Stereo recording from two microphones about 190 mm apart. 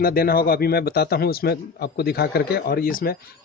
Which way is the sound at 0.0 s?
50° left (ahead or behind).